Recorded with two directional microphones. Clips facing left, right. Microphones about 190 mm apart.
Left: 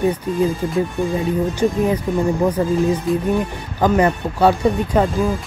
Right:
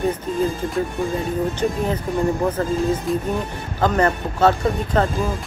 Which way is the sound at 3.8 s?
10° left (ahead or behind).